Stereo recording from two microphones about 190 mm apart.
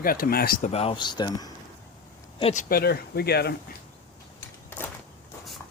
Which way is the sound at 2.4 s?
30° left (ahead or behind).